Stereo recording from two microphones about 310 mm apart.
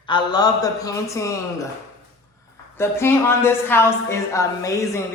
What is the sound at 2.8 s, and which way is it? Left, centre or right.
A woman's voice, centre.